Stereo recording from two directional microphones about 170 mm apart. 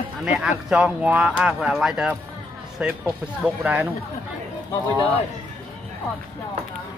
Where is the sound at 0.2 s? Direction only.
5° right (ahead or behind).